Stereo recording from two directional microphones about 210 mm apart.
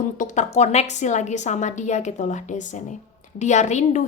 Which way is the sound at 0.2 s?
35° left (ahead or behind).